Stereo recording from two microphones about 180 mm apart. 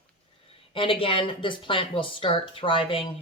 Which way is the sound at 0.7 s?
30° left (ahead or behind).